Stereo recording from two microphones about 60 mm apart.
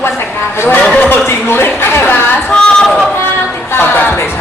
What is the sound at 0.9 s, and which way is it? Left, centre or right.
Speech, left.